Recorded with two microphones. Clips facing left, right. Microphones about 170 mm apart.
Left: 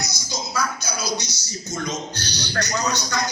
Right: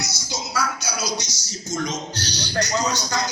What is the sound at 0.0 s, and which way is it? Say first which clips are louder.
Music: even; 90° right.